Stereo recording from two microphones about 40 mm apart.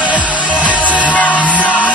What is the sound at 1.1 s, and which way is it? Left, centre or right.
Music, left.